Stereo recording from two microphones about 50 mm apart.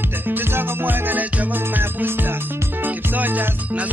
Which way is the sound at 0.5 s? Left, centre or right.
Right.